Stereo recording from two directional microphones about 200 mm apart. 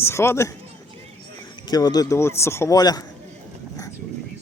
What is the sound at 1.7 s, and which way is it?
A man's voice, 20° left (ahead or behind).